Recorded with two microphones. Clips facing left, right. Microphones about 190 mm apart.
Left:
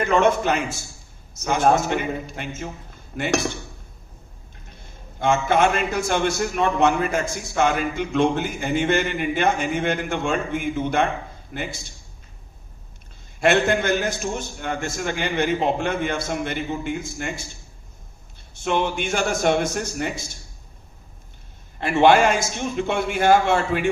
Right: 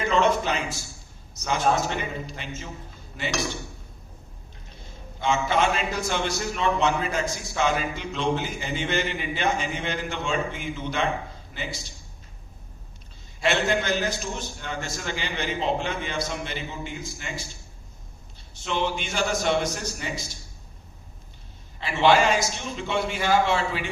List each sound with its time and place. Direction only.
0.1 s a man's voice: 55° left (ahead or behind)
5.2 s a man's voice: 55° left (ahead or behind)
13.4 s a man's voice: 55° left (ahead or behind)
18.5 s a man's voice: 55° left (ahead or behind)
21.8 s a man's voice: 55° left (ahead or behind)